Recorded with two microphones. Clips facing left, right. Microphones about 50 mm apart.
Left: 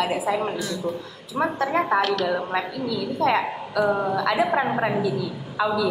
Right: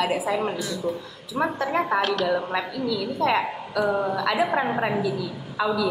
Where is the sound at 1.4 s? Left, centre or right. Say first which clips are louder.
Left 1 dB; centre.